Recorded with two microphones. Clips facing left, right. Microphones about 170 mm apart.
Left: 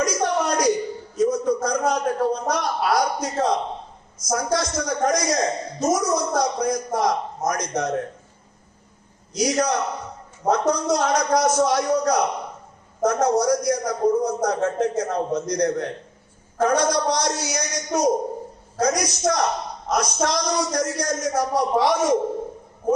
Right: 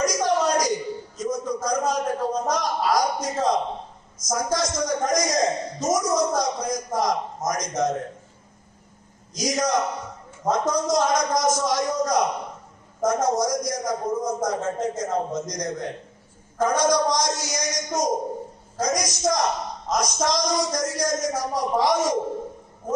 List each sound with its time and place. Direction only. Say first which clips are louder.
0.0 s a sound: even; 65° left (ahead or behind)
4.2 s a man's voice: left 1 dB; 65° left (ahead or behind)
9.3 s a man's voice: left 2 dB; 65° left (ahead or behind)